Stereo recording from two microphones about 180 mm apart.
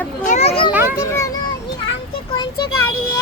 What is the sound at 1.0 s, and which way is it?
Children playing, 15° left (ahead or behind).